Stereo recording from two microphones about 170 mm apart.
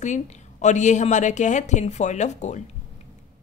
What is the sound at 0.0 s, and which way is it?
A woman's voice, 45° left (ahead or behind).